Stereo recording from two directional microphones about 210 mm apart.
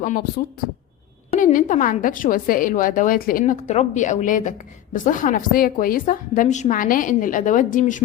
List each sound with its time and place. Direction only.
0.0 s a woman's voice: 40° left (ahead or behind)